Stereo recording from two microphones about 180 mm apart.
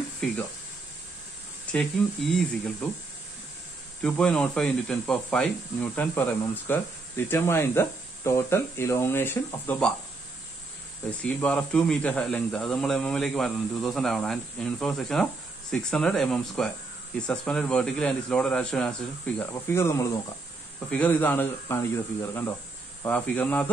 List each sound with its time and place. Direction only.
1.7 s a sound: 5° left (ahead or behind)
2.3 s speech: 5° left (ahead or behind)
4.0 s speech: 5° left (ahead or behind)
11.1 s speech: 5° left (ahead or behind)